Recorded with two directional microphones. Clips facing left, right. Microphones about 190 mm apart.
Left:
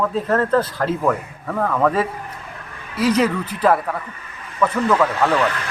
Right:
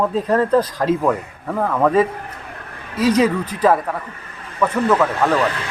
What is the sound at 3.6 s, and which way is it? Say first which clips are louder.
A man's voice: right 1 dB; 10° right (ahead or behind).